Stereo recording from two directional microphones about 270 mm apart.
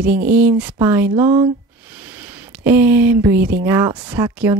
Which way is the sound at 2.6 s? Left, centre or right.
Centre.